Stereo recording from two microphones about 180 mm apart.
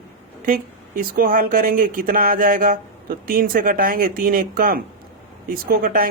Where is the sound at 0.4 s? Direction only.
50° right (ahead or behind).